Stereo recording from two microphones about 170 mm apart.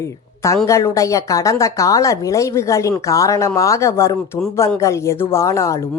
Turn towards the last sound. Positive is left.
turn(degrees=15)  # may be behind; listen again after turning